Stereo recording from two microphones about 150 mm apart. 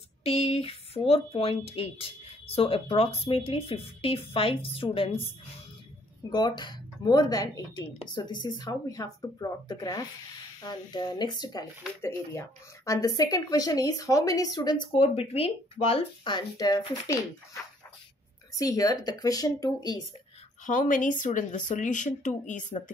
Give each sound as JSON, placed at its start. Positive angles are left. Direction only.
{"t": 0.2, "sound": "speech", "side_deg": 40}
{"t": 6.3, "sound": "speech", "side_deg": 30}
{"t": 18.5, "sound": "speech", "side_deg": 25}
{"t": 20.6, "sound": "speech", "side_deg": 60}